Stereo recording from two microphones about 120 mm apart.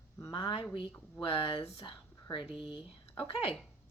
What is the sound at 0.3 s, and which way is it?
Speech, 40° left (ahead or behind).